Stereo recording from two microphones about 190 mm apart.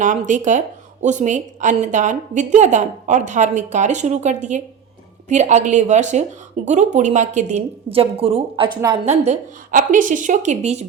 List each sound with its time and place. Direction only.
0.0 s a woman's voice: 40° right (ahead or behind)